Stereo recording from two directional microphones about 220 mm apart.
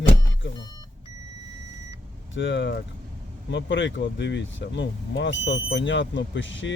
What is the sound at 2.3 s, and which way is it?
Speech, 55° left (ahead or behind).